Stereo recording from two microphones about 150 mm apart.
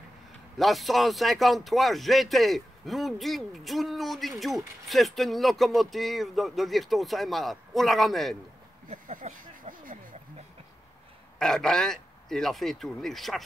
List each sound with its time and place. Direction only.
0.6 s speech: centre (ahead or behind)
8.8 s a sound: 60° right (ahead or behind)
11.3 s speech: 5° left (ahead or behind)